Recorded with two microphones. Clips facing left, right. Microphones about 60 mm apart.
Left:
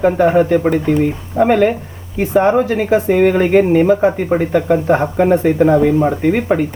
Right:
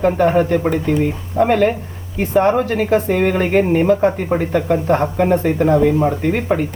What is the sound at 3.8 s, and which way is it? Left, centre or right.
Speech, centre.